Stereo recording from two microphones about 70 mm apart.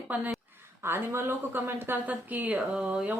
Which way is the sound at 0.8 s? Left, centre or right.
Right.